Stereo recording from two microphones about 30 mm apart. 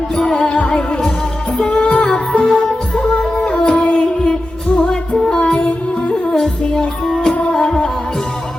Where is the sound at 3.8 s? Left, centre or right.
Left.